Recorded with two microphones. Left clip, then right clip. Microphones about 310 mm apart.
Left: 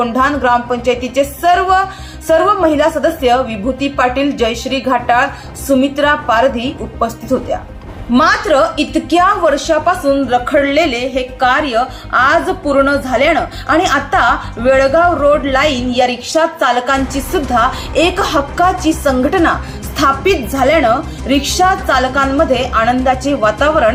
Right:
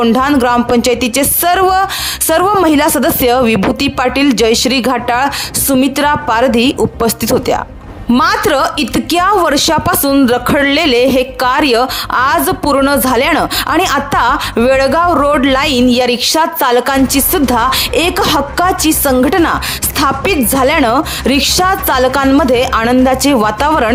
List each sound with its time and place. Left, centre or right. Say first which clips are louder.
0.0 s a woman's voice: right 2 dB; right
8.1 s a woman's voice: even; right